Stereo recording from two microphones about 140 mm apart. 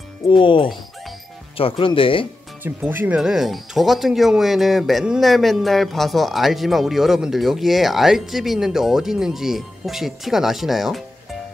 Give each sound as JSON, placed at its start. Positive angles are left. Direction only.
{"t": 0.3, "sound": "speech", "side_deg": 35}
{"t": 2.6, "sound": "speech", "side_deg": -15}